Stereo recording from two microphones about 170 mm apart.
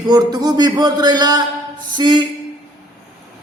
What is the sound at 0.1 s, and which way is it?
A man's voice, 25° right (ahead or behind).